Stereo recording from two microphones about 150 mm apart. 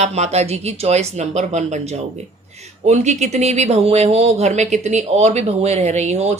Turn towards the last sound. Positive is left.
turn(degrees=-45)  # may be behind; listen again after turning